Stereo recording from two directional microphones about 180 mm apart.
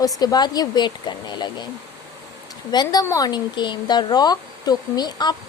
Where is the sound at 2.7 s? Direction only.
20° left (ahead or behind).